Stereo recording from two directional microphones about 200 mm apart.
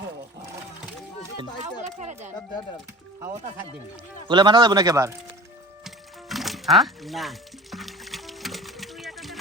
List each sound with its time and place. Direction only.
2.0 s a sound: 35° right (ahead or behind)
4.3 s speech: 20° right (ahead or behind)
5.8 s music: centre (ahead or behind)